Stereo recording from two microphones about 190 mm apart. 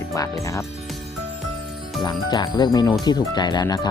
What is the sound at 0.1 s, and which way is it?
Speech, 15° left (ahead or behind).